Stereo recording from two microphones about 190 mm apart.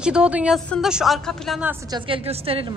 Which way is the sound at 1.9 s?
30° right (ahead or behind).